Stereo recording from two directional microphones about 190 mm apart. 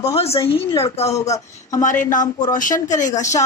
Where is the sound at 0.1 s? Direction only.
30° left (ahead or behind).